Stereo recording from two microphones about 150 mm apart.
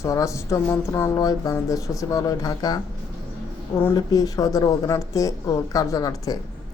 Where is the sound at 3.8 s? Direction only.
25° left (ahead or behind).